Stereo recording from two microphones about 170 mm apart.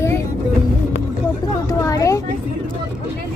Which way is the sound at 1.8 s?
20° left (ahead or behind).